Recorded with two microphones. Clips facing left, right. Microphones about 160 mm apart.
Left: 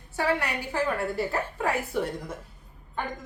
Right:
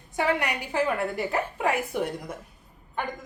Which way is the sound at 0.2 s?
15° right (ahead or behind).